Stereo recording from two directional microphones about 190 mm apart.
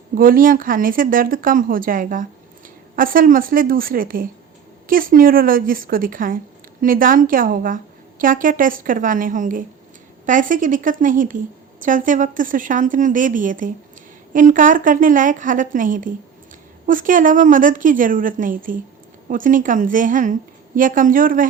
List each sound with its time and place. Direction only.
0.1 s a woman's voice: 45° right (ahead or behind)